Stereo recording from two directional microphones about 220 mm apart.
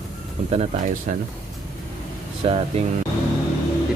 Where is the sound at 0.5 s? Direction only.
35° right (ahead or behind).